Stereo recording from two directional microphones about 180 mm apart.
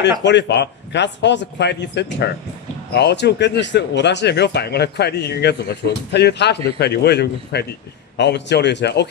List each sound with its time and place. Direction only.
0.0 s speech: 75° left (ahead or behind)